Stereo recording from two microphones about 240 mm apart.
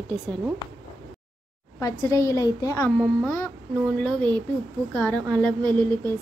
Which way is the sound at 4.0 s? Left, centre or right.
Centre.